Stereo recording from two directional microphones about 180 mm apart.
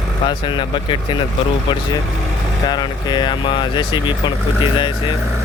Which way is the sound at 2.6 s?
25° left (ahead or behind).